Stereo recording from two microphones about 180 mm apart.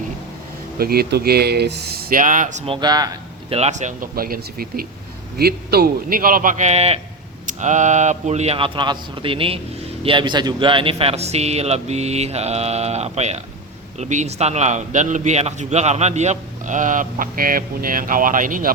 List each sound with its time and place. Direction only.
0.8 s speech: 60° right (ahead or behind); by 2.7 s 40° right (ahead or behind)
2.8 s speech: 20° right (ahead or behind)
3.5 s a man's voice: 40° right (ahead or behind)